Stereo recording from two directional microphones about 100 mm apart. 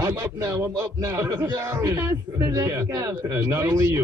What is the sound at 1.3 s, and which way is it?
Speech, 40° right (ahead or behind).